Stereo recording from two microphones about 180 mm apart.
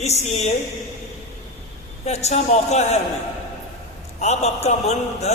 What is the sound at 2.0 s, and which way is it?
Speech, 35° left (ahead or behind).